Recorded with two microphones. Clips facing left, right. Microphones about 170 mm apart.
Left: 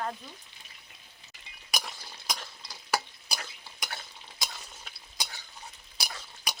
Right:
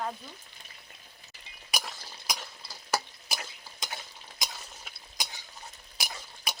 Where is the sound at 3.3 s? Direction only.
20° right (ahead or behind).